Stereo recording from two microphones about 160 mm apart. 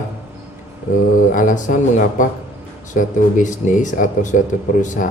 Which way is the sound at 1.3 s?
55° left (ahead or behind).